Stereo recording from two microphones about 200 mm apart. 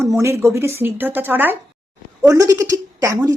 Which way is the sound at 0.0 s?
15° right (ahead or behind).